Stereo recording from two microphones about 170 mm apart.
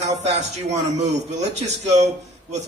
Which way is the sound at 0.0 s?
40° right (ahead or behind).